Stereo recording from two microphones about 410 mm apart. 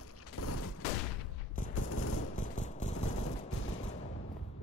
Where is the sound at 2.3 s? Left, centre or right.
Centre.